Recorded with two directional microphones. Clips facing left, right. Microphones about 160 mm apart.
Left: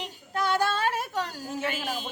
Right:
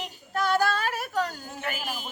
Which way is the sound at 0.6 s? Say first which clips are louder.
Even; 25° left (ahead or behind).